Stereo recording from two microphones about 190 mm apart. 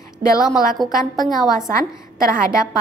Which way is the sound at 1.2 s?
20° left (ahead or behind).